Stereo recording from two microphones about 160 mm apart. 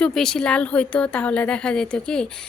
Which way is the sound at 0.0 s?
5° left (ahead or behind).